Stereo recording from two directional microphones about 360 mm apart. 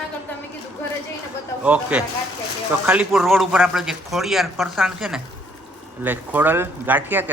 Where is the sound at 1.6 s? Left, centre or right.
Centre.